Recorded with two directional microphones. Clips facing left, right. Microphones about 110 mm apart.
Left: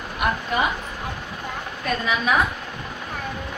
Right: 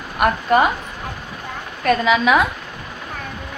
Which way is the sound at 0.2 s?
55° right (ahead or behind).